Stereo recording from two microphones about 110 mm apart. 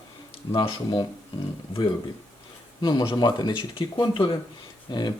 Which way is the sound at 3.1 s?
40° left (ahead or behind).